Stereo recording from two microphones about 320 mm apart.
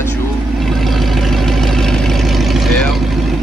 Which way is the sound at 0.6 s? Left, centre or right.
Centre.